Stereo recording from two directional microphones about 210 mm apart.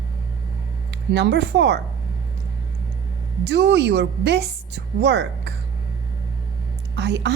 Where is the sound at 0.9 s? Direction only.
55° right (ahead or behind).